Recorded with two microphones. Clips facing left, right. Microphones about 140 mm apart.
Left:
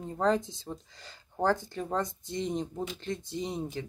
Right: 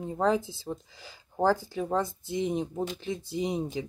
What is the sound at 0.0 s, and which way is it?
Speech, 10° right (ahead or behind).